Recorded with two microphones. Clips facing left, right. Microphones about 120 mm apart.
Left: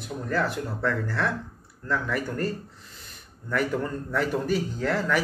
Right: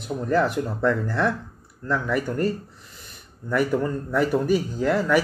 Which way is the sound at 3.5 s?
10° right (ahead or behind).